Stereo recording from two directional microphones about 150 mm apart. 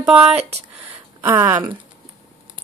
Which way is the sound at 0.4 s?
45° right (ahead or behind).